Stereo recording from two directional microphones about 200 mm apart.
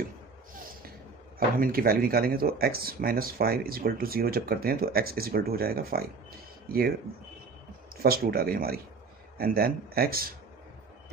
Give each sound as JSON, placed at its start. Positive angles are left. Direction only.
{"t": 0.6, "sound": "a sound", "side_deg": -45}
{"t": 1.6, "sound": "speech", "side_deg": -50}
{"t": 7.9, "sound": "speech", "side_deg": -50}